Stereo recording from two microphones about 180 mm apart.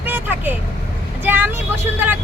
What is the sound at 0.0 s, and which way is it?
Vehicle, 10° right (ahead or behind).